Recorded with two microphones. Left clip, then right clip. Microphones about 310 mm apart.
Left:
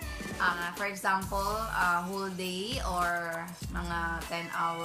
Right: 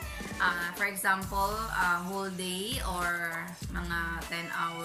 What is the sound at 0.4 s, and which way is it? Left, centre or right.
A woman's voice, centre.